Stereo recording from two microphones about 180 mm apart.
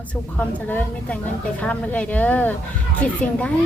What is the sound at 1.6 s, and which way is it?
Speech, 5° left (ahead or behind).